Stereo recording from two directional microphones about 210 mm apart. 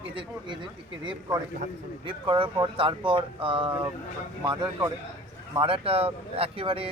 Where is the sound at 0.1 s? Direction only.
25° right (ahead or behind).